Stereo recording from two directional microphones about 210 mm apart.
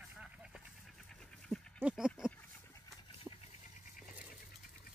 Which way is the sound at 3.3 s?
10° right (ahead or behind).